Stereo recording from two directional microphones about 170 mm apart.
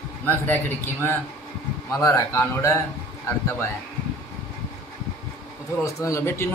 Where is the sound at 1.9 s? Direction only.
20° left (ahead or behind).